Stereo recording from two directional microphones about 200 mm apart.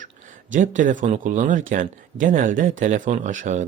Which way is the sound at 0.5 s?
40° right (ahead or behind).